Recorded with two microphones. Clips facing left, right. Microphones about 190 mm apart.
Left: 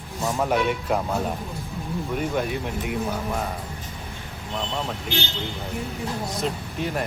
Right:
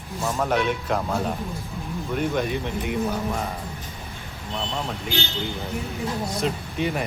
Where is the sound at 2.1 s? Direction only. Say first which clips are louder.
Right 2 dB; 5° left (ahead or behind).